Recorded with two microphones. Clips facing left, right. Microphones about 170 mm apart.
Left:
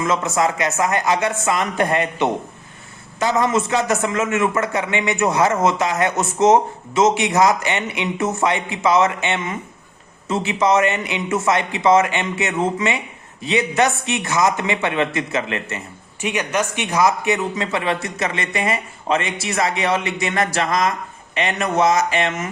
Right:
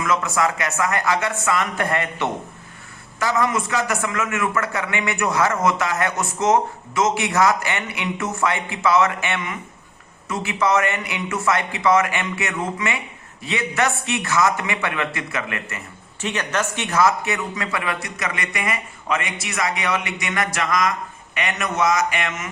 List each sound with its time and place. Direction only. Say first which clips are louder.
0.0 s a man's voice: left 2 dB; 25° left (ahead or behind)
16.2 s a man's voice: left 3 dB; 10° left (ahead or behind); by 22.4 s 30° left (ahead or behind)